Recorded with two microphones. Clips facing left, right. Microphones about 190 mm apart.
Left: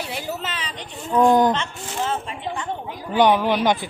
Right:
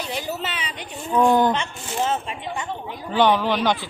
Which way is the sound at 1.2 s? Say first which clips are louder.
Left 2 dB; 15° left (ahead or behind).